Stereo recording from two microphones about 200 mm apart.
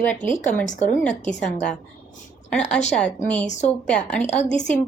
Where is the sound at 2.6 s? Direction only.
35° left (ahead or behind).